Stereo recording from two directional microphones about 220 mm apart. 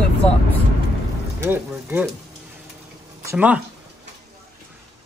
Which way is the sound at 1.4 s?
10° right (ahead or behind).